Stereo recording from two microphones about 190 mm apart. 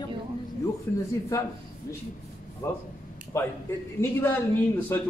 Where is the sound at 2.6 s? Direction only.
15° left (ahead or behind).